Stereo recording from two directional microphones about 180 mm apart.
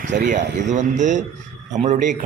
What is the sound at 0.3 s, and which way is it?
A man's voice, 45° right (ahead or behind).